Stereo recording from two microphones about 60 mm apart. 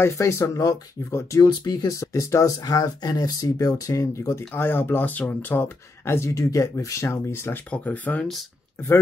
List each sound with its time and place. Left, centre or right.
0.2 s speech: left
4.6 s speech: left
6.3 s speech: left
7.7 s speech: left